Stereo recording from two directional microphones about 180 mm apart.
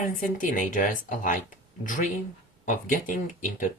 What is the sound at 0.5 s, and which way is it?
Speech, 45° left (ahead or behind).